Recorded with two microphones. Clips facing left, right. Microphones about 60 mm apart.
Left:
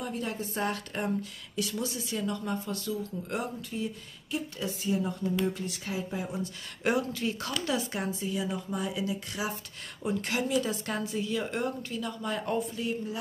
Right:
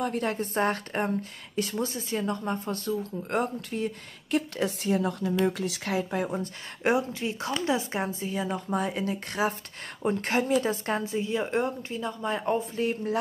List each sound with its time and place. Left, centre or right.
0.0 s speech: right
5.4 s speech: right
6.8 s a woman's voice: right